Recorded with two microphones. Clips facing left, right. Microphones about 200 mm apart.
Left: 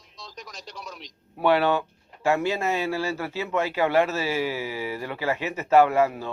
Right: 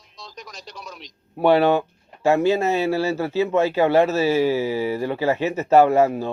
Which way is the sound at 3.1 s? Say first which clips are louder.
Right 7 dB; 35° right (ahead or behind).